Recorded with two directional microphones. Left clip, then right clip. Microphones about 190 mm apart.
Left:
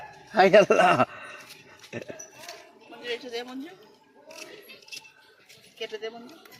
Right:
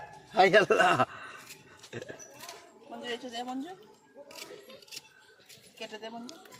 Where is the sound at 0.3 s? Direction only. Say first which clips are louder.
Left 5 dB; 25° left (ahead or behind).